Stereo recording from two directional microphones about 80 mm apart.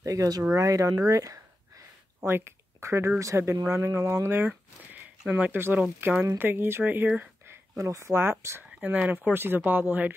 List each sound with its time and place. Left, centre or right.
0.0 s speech: right
2.1 s a sound: right
3.2 s speech: right
5.3 s speech: right
7.4 s speech: right